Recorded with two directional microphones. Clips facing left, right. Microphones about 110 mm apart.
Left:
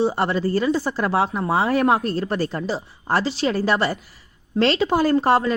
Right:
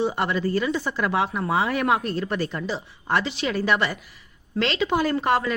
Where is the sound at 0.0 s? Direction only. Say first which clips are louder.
Left 3 dB; 35° left (ahead or behind).